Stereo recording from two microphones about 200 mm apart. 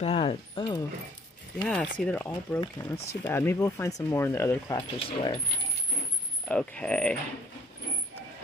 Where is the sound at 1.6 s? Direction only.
5° left (ahead or behind); by 5.4 s 25° left (ahead or behind).